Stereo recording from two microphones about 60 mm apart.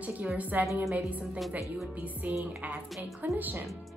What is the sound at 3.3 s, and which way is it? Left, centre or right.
Music, right.